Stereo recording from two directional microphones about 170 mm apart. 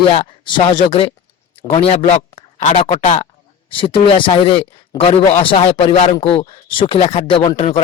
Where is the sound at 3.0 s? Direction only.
45° left (ahead or behind).